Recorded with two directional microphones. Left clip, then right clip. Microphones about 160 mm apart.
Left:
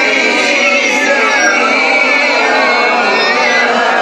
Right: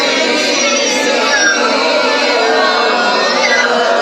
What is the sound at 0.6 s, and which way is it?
Music, 50° right (ahead or behind).